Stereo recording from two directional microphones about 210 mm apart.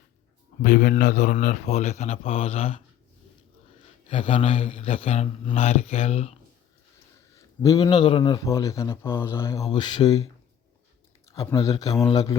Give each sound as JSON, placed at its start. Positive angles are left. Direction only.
{"t": 0.6, "sound": "a man's voice", "side_deg": 40}
{"t": 4.0, "sound": "speech", "side_deg": 25}
{"t": 7.3, "sound": "a man's voice", "side_deg": 15}
{"t": 11.3, "sound": "a man's voice", "side_deg": 15}